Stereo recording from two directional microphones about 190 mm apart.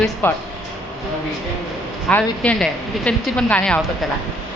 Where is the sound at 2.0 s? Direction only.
5° left (ahead or behind).